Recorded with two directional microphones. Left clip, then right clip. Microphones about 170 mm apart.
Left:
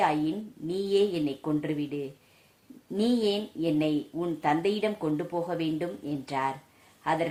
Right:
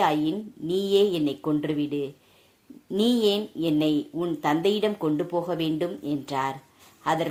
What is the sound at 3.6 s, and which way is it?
A woman's voice, 35° right (ahead or behind).